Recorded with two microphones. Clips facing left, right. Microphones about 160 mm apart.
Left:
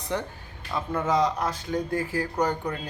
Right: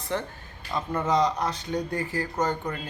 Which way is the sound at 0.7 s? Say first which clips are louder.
Even; 5° left (ahead or behind).